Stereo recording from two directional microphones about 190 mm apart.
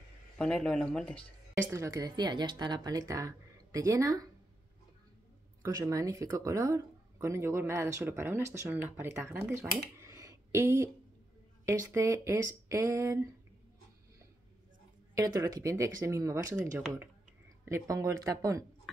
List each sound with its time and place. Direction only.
0.4 s speech: 5° left (ahead or behind)
1.7 s speech: 15° right (ahead or behind)
5.6 s speech: 20° right (ahead or behind)
15.1 s speech: 15° right (ahead or behind)
16.7 s speech: centre (ahead or behind)
17.6 s speech: 15° right (ahead or behind)